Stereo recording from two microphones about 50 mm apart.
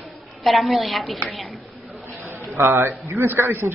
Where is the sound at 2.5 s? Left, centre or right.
Right.